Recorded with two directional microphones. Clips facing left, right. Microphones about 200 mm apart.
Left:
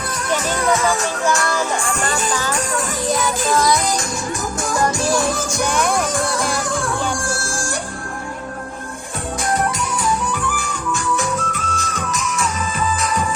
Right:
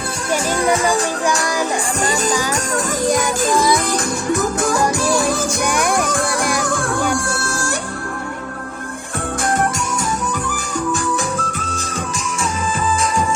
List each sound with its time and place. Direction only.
0.6 s speech: 15° right (ahead or behind)
1.4 s music: 15° right (ahead or behind)
3.5 s music: 15° right (ahead or behind)
5.6 s music: 10° right (ahead or behind)
9.4 s music: 50° right (ahead or behind)
10.5 s music: 40° right (ahead or behind)